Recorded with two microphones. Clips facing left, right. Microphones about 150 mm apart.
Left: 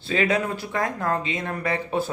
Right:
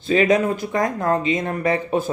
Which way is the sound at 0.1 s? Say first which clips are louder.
Right 6 dB; 20° right (ahead or behind).